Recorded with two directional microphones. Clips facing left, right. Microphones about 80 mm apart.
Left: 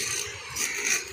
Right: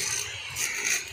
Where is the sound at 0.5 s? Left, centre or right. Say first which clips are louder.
Left 1 dB; centre.